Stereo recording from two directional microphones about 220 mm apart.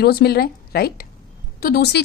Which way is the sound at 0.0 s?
45° left (ahead or behind).